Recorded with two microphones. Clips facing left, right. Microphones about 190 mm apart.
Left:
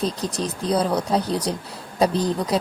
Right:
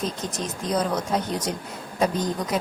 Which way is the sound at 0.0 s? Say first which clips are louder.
Left 4 dB; 35° left (ahead or behind).